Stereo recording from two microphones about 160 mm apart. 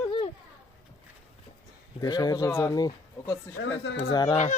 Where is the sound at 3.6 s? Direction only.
90° left.